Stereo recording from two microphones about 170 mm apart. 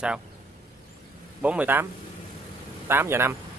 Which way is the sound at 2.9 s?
15° right (ahead or behind).